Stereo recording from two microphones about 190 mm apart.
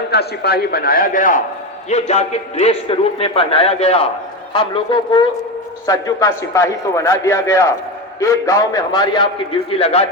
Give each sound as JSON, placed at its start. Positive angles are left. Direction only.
{"t": 0.1, "sound": "a man's voice", "side_deg": 60}